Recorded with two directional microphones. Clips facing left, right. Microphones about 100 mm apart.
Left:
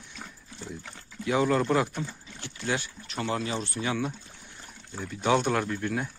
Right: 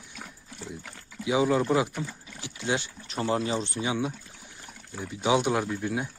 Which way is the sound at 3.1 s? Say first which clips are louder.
Right 3 dB; 35° right (ahead or behind).